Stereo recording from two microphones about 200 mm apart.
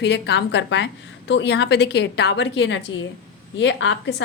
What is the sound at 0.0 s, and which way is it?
A woman's voice, 60° left (ahead or behind).